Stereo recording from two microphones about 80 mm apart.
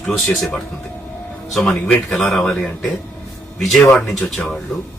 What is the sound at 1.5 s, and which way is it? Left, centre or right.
Speech, centre.